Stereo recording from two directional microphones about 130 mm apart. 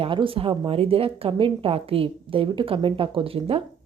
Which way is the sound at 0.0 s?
40° right (ahead or behind).